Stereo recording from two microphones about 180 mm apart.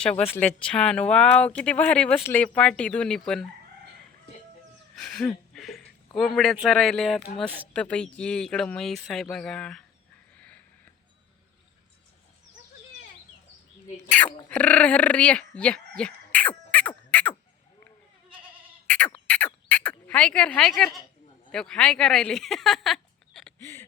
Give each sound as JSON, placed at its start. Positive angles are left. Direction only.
{"t": 0.0, "sound": "speech", "side_deg": 5}
{"t": 4.9, "sound": "a sound", "side_deg": 5}
{"t": 6.1, "sound": "speech", "side_deg": 0}
{"t": 10.3, "sound": "sniff", "side_deg": 5}
{"t": 13.9, "sound": "speech", "side_deg": 10}
{"t": 18.3, "sound": "goat", "side_deg": -30}
{"t": 18.9, "sound": "insect", "side_deg": 5}
{"t": 19.3, "sound": "a sound", "side_deg": 5}
{"t": 21.5, "sound": "speech", "side_deg": 5}
{"t": 23.6, "sound": "a sound", "side_deg": 15}